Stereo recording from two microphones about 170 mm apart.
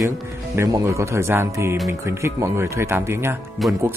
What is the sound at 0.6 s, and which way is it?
Speech, 15° right (ahead or behind).